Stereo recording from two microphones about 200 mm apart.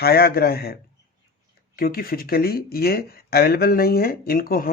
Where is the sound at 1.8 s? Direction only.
50° left (ahead or behind).